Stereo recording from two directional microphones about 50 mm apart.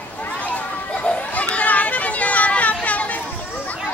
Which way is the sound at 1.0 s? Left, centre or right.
Left.